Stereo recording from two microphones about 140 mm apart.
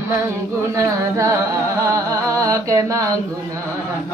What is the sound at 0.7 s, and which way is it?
Music, 25° right (ahead or behind).